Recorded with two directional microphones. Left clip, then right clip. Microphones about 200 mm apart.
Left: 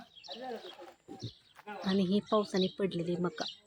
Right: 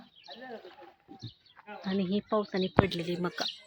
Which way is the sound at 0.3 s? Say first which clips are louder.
Left 2 dB; 25° left (ahead or behind).